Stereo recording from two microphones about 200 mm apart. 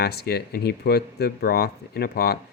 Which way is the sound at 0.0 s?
50° left (ahead or behind).